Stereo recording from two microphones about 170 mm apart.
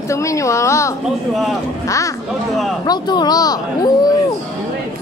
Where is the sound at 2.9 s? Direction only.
25° left (ahead or behind).